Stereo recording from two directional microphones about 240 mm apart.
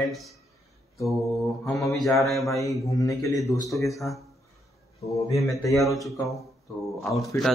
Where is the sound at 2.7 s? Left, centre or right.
Centre.